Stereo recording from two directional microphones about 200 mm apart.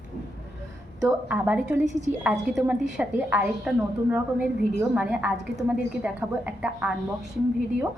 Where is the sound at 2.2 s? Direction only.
Centre (ahead or behind).